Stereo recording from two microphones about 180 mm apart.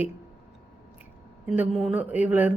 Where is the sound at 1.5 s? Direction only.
Centre (ahead or behind).